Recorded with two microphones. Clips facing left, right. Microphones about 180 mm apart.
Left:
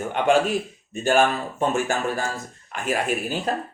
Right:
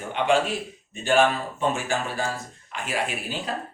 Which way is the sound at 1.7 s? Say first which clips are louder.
Left 4 dB; 45° left (ahead or behind).